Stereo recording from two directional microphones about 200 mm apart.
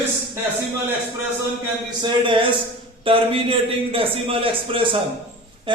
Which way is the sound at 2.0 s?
25° right (ahead or behind).